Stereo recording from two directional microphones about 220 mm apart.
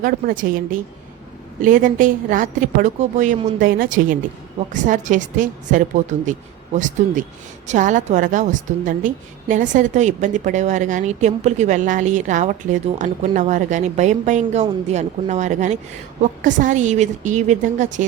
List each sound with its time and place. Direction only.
0.0 s a woman's voice: 40° right (ahead or behind)